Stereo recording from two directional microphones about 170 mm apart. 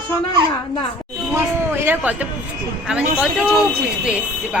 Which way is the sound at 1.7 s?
10° right (ahead or behind).